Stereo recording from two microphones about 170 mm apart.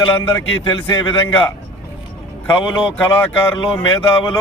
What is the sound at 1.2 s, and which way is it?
Speech, 15° left (ahead or behind).